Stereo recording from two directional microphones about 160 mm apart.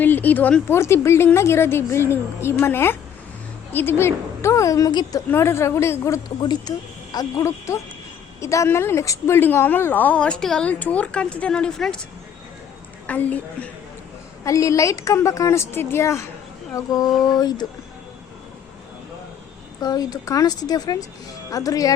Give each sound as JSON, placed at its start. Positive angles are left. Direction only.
{"t": 0.0, "sound": "a woman's voice", "side_deg": 10}
{"t": 13.1, "sound": "a woman's voice", "side_deg": 10}
{"t": 19.8, "sound": "a woman's voice", "side_deg": 25}